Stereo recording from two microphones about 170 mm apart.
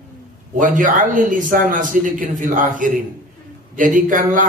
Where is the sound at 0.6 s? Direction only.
50° right (ahead or behind).